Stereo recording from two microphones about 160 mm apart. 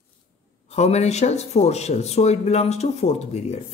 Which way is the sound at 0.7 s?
45° left (ahead or behind).